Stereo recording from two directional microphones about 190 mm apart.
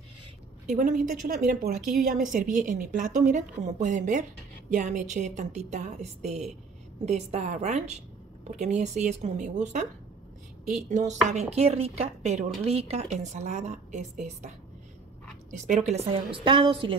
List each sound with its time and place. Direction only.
0.7 s a woman's voice: 45° right (ahead or behind)
15.5 s a woman's voice: 40° right (ahead or behind)